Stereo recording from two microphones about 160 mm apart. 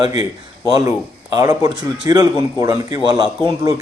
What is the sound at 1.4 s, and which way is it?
A man's voice, 20° right (ahead or behind).